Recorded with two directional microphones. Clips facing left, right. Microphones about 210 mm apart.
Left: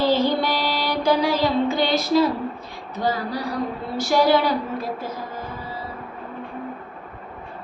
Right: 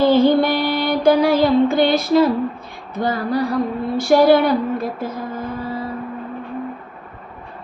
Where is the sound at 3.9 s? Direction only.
55° right (ahead or behind).